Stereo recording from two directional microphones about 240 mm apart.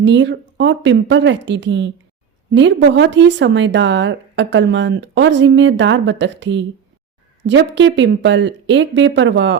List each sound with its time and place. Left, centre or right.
0.0 s a woman's voice: right